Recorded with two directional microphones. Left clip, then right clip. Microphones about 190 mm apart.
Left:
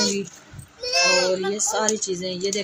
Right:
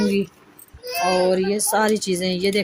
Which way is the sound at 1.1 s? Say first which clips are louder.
Right 2 dB; 65° right (ahead or behind).